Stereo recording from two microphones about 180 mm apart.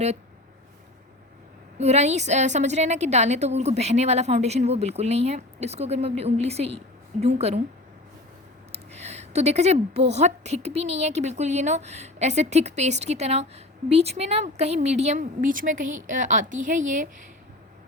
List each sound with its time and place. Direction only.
1.8 s a woman's voice: 35° right (ahead or behind)
8.7 s a woman's voice: 35° right (ahead or behind)